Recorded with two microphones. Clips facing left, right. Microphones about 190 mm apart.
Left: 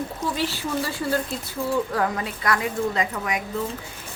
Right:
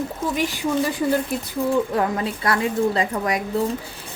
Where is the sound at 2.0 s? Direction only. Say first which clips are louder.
Right 3 dB; 30° right (ahead or behind).